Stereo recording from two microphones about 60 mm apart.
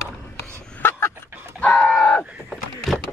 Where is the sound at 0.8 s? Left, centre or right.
Left.